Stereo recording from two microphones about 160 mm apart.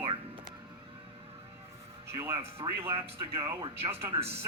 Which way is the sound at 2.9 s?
35° right (ahead or behind).